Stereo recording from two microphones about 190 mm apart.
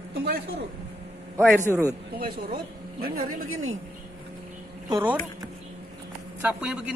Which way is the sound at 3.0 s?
50° right (ahead or behind).